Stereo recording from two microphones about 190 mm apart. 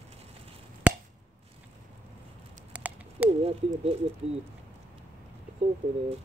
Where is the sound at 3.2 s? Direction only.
30° right (ahead or behind).